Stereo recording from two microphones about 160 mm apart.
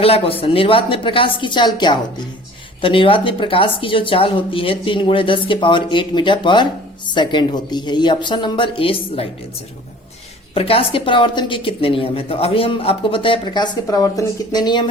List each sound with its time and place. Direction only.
0.0 s a woman's voice: 35° left (ahead or behind)
10.5 s a woman's voice: 35° left (ahead or behind)